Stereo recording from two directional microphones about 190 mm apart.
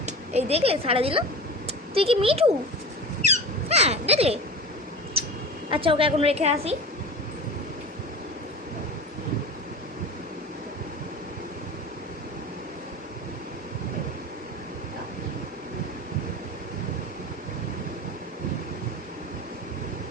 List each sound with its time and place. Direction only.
0.0 s a woman's voice: 35° right (ahead or behind)
3.2 s a sound: 35° right (ahead or behind)
5.7 s a woman's voice: 30° right (ahead or behind)